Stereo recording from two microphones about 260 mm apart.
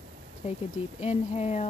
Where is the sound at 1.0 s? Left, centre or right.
Left.